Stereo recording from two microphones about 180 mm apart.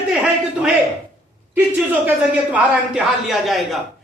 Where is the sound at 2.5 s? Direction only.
5° right (ahead or behind).